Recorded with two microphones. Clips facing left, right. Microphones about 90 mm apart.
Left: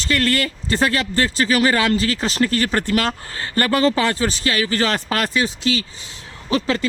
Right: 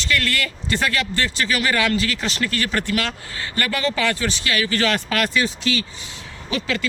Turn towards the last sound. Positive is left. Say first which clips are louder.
# left 4 dB
turn(degrees=35)  # may be behind; listen again after turning